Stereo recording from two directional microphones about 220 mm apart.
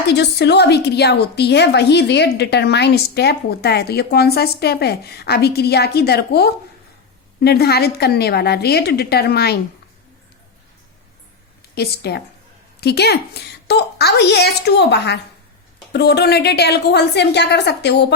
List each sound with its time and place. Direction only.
0.1 s a woman's voice: 50° left (ahead or behind)
11.7 s a woman's voice: 45° left (ahead or behind)